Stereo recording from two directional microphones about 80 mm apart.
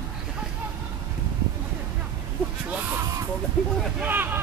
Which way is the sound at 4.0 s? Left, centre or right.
Right.